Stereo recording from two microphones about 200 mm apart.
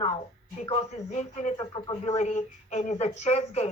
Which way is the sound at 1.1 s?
35° left (ahead or behind).